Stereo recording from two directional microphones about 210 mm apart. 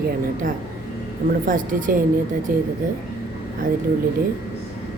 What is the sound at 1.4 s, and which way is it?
A woman's voice, 40° right (ahead or behind).